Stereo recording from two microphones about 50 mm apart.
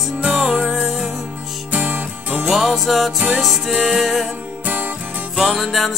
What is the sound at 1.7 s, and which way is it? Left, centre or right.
Music, right.